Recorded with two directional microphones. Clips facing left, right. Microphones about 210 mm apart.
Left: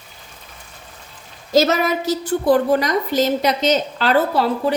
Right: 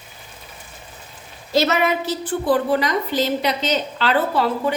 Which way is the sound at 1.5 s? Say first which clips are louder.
Left 2 dB; 40° left (ahead or behind).